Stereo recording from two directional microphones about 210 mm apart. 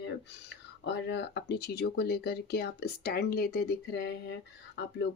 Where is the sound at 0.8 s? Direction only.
55° left (ahead or behind).